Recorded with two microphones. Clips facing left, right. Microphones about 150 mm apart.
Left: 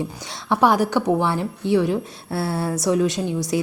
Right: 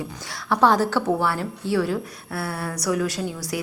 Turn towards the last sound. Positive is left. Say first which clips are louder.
# left 5 dB
turn(degrees=20)  # may be behind; listen again after turning